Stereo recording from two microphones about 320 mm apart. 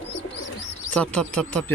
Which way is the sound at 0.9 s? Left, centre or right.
Centre.